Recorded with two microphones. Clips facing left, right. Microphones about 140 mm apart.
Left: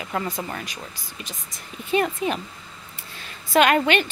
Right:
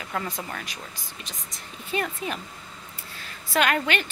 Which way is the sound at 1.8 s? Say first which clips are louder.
Left 7 dB; 20° left (ahead or behind).